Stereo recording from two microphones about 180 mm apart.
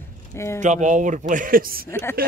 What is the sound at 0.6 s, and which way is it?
Speech, 45° right (ahead or behind).